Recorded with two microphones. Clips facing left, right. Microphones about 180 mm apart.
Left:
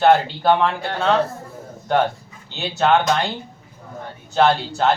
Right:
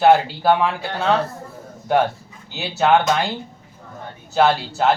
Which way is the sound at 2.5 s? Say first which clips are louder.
Right 1 dB; 5° right (ahead or behind).